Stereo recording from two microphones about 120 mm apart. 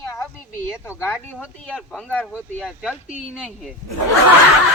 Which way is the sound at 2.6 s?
5° right (ahead or behind).